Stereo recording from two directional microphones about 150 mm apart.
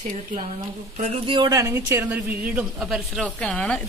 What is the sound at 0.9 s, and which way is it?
Speech, 50° right (ahead or behind).